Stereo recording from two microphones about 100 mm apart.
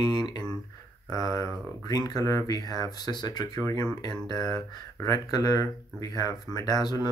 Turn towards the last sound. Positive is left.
turn(degrees=45)  # may be behind; listen again after turning